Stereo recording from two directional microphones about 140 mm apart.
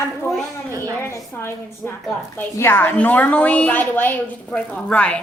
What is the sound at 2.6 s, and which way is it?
A woman's voice, 15° left (ahead or behind).